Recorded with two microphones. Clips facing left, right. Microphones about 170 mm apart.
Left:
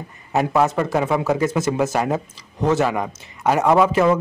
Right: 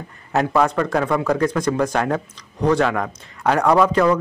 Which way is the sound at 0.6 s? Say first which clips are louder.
Even; 5° left (ahead or behind).